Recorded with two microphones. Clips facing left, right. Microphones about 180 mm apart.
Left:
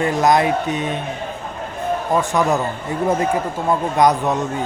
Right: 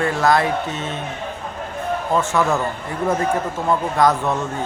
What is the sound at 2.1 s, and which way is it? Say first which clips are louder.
A man's voice: left 1 dB; 15° left (ahead or behind).